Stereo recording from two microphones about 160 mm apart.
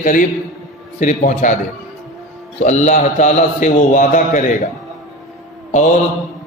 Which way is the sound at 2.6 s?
45° left (ahead or behind).